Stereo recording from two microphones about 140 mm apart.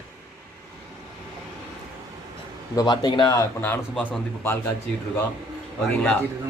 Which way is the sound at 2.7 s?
30° left (ahead or behind).